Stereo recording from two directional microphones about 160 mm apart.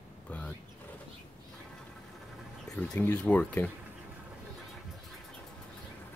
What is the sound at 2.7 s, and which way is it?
Speech, 10° left (ahead or behind).